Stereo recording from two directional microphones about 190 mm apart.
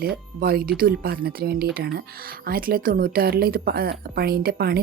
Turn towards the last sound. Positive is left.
turn(degrees=-55)  # may be behind; listen again after turning